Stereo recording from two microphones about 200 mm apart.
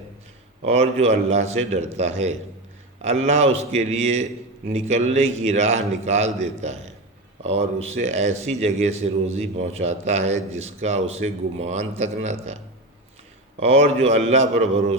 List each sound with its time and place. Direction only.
0.6 s a man's voice: 30° right (ahead or behind)
13.6 s a man's voice: 30° right (ahead or behind)